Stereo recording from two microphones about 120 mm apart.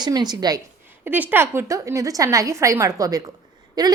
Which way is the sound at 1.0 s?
15° right (ahead or behind).